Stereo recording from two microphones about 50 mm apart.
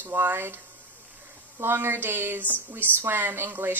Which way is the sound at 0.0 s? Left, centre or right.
Right.